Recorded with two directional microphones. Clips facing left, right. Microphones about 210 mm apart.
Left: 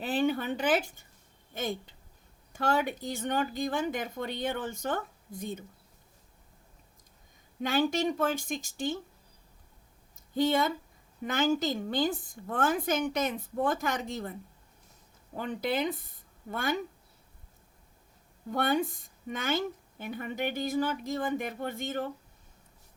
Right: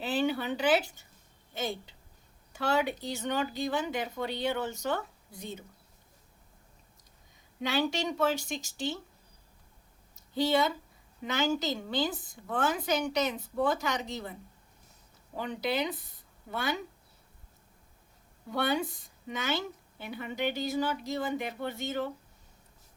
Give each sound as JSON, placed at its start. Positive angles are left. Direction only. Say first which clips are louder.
{"t": 0.0, "sound": "a woman's voice", "louder": "left 1 dB", "side_deg": 50}
{"t": 7.6, "sound": "a woman's voice", "louder": "left 3 dB", "side_deg": 50}
{"t": 10.3, "sound": "a woman's voice", "louder": "left 1 dB", "side_deg": 50}
{"t": 15.4, "sound": "a woman's voice", "louder": "left 1 dB", "side_deg": 50}
{"t": 18.5, "sound": "a woman's voice", "louder": "left 2 dB", "side_deg": 50}